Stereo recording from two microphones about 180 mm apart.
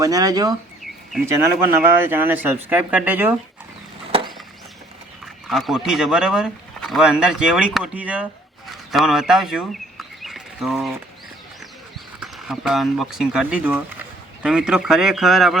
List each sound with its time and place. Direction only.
0.0 s speech: 20° right (ahead or behind)
5.2 s speech: centre (ahead or behind)
10.2 s a sound: centre (ahead or behind)
12.2 s speech: centre (ahead or behind)